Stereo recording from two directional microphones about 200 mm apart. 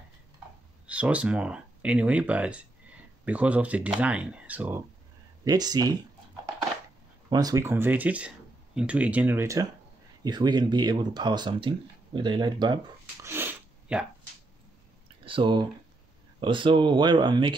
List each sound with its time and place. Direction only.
0.8 s speech: 5° right (ahead or behind)
5.4 s speech: 20° right (ahead or behind)
7.2 s speech: 20° right (ahead or behind)
13.3 s sneeze: 10° right (ahead or behind)
15.2 s speech: 25° right (ahead or behind)